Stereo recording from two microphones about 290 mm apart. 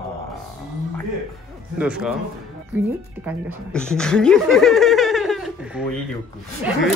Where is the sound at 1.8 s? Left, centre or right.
Centre.